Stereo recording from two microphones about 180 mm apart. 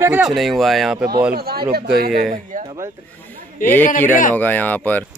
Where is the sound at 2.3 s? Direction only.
45° right (ahead or behind).